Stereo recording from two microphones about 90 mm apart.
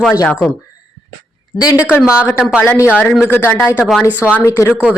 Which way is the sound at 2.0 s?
10° right (ahead or behind).